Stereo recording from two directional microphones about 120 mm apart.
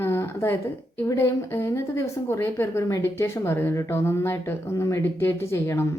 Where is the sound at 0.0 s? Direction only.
25° left (ahead or behind).